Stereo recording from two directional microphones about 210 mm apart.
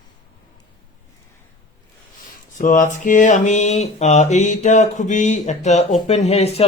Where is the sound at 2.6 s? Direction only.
35° left (ahead or behind).